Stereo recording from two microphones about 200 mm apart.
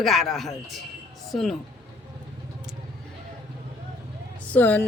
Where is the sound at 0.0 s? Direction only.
Centre (ahead or behind).